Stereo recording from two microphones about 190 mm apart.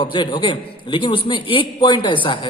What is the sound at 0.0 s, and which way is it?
A man's voice, 25° left (ahead or behind).